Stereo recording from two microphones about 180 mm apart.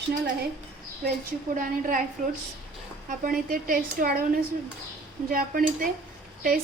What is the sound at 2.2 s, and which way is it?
A woman's voice, 45° right (ahead or behind).